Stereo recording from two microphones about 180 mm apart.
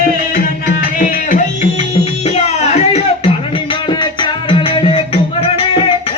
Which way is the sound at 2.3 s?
35° left (ahead or behind).